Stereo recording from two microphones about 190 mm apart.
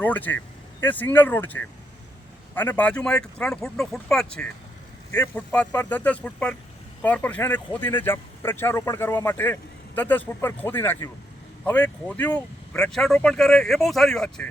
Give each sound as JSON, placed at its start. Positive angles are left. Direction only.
{"t": 0.0, "sound": "speech", "side_deg": 10}